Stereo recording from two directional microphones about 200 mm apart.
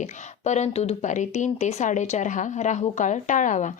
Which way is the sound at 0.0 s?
35° left (ahead or behind).